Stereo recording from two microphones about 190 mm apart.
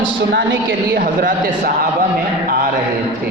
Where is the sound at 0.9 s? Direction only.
45° right (ahead or behind).